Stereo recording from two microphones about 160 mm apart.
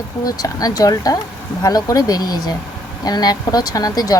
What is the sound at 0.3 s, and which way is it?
Speech, 25° left (ahead or behind).